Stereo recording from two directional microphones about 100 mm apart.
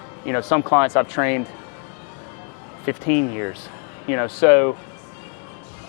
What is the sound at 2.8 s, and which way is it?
Speech, 20° left (ahead or behind).